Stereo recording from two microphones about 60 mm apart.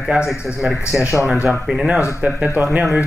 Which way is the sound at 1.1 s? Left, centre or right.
Centre.